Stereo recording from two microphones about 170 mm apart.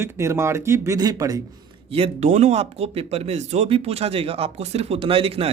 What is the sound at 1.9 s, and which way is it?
Speech, 35° right (ahead or behind).